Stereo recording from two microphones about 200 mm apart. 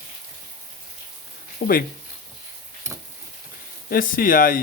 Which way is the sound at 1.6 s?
45° left (ahead or behind).